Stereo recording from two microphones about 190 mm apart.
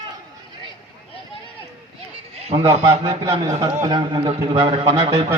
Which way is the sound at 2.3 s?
30° right (ahead or behind).